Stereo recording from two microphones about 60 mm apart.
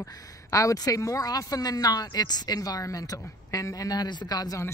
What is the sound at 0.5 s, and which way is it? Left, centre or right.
Speech, left.